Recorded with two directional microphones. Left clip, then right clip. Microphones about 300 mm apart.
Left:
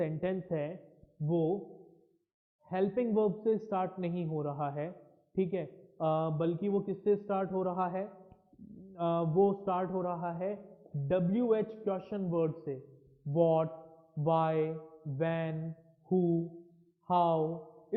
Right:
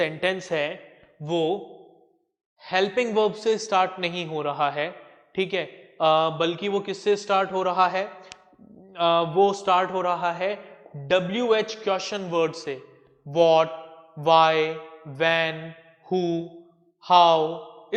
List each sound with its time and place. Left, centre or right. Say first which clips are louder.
0.0 s a man's voice: right 10 dB; centre
1.3 s speech: right 8 dB; right
2.6 s a man's voice: right 9 dB; centre
16.0 s speech: right 6 dB; right
17.1 s a man's voice: right 12 dB; centre